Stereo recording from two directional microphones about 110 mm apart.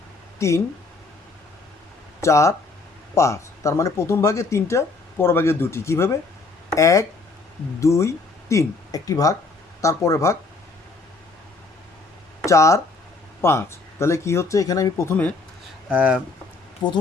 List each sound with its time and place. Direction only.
0.3 s speech: 25° left (ahead or behind)
2.2 s speech: 25° left (ahead or behind)
12.5 s speech: 30° left (ahead or behind)
15.9 s speech: 10° right (ahead or behind)
16.8 s speech: 40° left (ahead or behind)